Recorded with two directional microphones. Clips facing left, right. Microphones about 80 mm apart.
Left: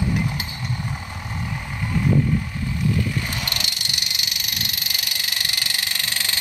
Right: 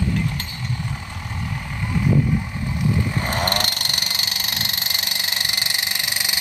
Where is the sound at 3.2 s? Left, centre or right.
Right.